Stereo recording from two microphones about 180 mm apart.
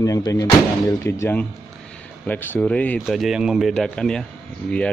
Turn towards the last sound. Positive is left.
turn(degrees=5)  # may be behind; listen again after turning